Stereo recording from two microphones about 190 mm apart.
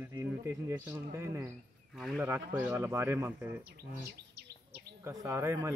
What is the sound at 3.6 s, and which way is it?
Insect, 55° right (ahead or behind).